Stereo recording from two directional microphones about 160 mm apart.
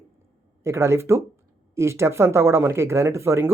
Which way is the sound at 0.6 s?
15° right (ahead or behind).